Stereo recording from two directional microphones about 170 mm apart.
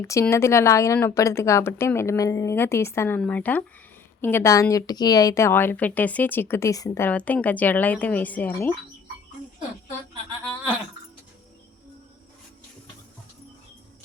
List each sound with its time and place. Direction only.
0.0 s a woman's voice: 15° left (ahead or behind)